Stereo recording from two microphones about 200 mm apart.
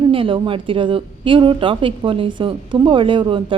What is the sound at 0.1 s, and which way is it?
Speech, 25° right (ahead or behind).